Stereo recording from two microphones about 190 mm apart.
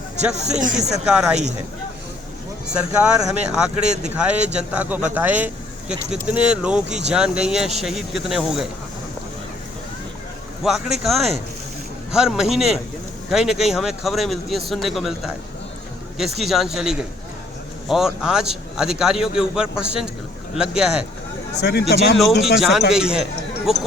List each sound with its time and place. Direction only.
0.3 s speech: 5° right (ahead or behind)
2.7 s speech: 5° right (ahead or behind)
10.6 s speech: 5° right (ahead or behind)
16.4 s speech: centre (ahead or behind)
21.6 s speech: 60° left (ahead or behind)
22.2 s speech: centre (ahead or behind)